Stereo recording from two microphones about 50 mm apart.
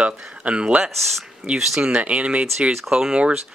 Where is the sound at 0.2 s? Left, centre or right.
Right.